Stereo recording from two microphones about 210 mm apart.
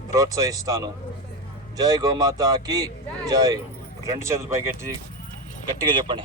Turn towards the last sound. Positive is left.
turn(degrees=-25)  # may be behind; listen again after turning